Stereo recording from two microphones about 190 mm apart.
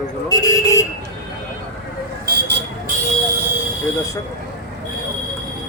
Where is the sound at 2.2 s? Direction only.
60° right (ahead or behind).